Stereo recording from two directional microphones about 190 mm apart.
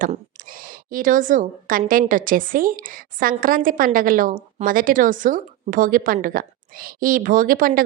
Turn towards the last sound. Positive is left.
turn(degrees=-50)  # may be behind; listen again after turning